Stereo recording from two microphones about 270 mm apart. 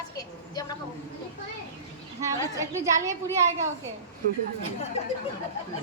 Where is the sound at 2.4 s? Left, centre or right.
Centre.